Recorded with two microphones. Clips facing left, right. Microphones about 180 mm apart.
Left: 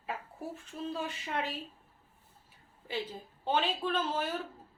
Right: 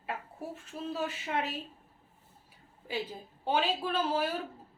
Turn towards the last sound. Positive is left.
turn(degrees=-10)  # may be behind; listen again after turning